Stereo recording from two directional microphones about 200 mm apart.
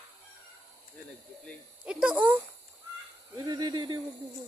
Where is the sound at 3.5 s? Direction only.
20° right (ahead or behind).